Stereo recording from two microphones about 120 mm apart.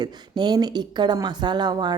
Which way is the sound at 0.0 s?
35° right (ahead or behind).